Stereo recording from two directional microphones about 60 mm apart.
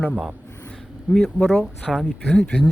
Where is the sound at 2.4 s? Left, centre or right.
Centre.